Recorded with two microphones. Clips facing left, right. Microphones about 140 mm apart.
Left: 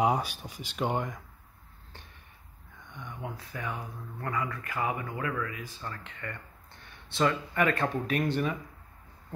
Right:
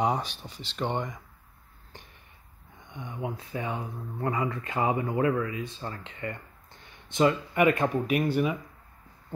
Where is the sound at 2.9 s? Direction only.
20° right (ahead or behind).